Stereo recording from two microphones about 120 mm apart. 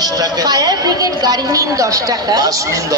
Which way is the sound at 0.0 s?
35° right (ahead or behind).